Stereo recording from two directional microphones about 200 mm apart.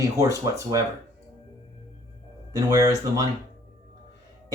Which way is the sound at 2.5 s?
20° right (ahead or behind).